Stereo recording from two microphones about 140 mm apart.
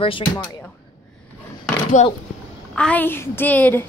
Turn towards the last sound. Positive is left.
turn(degrees=10)  # may be behind; listen again after turning